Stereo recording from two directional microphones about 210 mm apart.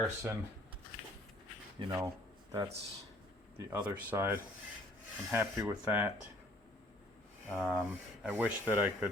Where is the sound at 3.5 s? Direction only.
15° right (ahead or behind).